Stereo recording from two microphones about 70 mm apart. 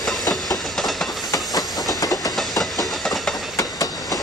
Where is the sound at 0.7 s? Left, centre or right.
Centre.